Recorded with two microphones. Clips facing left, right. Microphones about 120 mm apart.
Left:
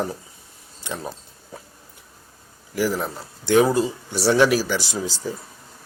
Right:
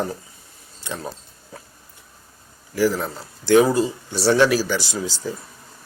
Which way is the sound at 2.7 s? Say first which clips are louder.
Right 3 dB; 15° left (ahead or behind).